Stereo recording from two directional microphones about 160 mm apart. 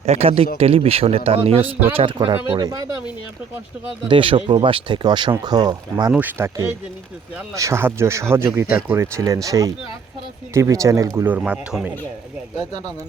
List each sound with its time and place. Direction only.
0.0 s speech: 40° right (ahead or behind)
2.6 s speech: 20° right (ahead or behind)
4.1 s speech: 30° right (ahead or behind)
6.1 s speech: 10° right (ahead or behind)
11.3 s speech: 5° right (ahead or behind)
12.5 s speech: 25° right (ahead or behind)